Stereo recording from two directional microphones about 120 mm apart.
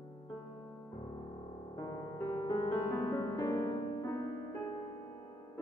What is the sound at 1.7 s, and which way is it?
Music, 35° left (ahead or behind).